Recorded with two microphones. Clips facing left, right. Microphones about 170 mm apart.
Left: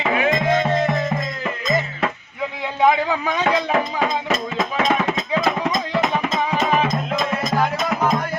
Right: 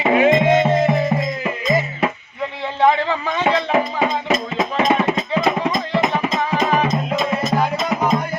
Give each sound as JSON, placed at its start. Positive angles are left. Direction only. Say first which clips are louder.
{"t": 0.0, "sound": "music", "louder": "right 5 dB", "side_deg": -25}
{"t": 2.8, "sound": "a man's voice", "louder": "right 1 dB", "side_deg": 10}
{"t": 3.7, "sound": "speech", "louder": "right 2 dB", "side_deg": -10}
{"t": 4.5, "sound": "music", "louder": "right 2 dB", "side_deg": -5}